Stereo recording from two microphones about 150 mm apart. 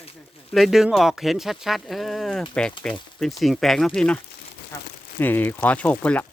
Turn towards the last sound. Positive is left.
turn(degrees=10)  # may be behind; listen again after turning